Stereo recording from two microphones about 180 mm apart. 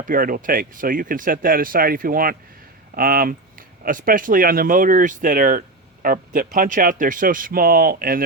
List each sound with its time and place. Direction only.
0.0 s speech: 50° right (ahead or behind)